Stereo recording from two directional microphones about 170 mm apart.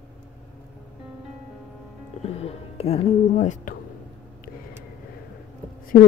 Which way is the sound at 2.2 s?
35° left (ahead or behind).